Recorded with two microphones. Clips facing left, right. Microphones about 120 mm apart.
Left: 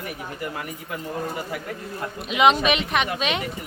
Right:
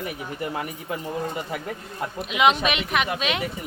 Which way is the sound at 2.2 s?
Centre (ahead or behind).